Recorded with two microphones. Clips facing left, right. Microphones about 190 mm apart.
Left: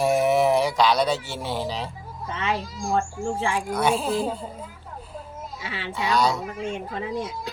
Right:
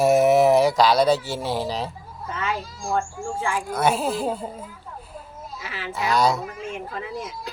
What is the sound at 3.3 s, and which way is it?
Speech, 25° left (ahead or behind).